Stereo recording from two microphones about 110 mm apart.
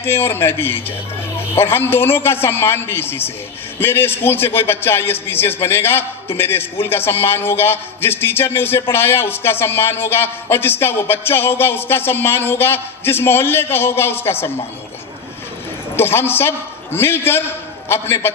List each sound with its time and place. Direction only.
0.0 s a man's voice: 20° left (ahead or behind)
16.0 s a man's voice: 20° left (ahead or behind)